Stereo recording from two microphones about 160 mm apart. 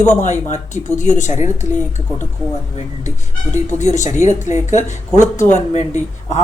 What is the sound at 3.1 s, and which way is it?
Speech, 50° left (ahead or behind).